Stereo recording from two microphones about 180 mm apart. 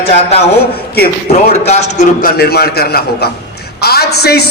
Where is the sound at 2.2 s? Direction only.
60° left (ahead or behind).